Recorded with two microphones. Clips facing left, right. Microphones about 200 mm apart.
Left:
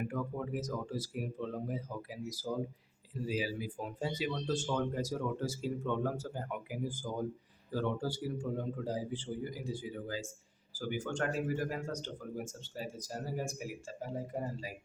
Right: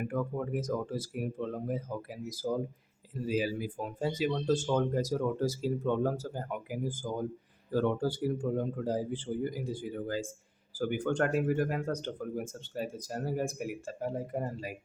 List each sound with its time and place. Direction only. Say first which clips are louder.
0.1 s a man's voice: right 4 dB; 50° right (ahead or behind)
7.7 s a man's voice: right 6 dB; 55° right (ahead or behind)